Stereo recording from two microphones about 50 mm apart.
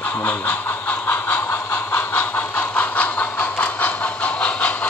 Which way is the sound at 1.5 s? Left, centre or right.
Left.